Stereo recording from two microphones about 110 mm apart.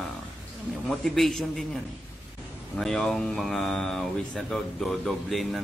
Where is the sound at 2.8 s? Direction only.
5° left (ahead or behind).